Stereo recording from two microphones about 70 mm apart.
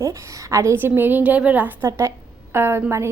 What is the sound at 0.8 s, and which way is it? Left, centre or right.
Speech, right.